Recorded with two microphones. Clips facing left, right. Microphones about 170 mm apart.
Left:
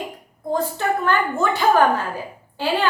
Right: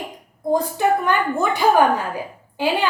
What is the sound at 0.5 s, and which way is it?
A woman's voice, 15° right (ahead or behind).